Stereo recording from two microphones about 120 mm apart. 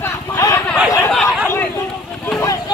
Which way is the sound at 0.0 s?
25° left (ahead or behind).